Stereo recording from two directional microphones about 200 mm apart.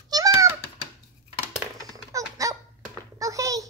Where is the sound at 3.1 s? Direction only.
15° right (ahead or behind).